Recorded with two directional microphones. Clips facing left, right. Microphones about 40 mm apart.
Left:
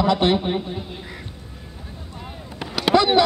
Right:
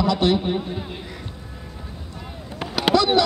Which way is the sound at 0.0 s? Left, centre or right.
Left.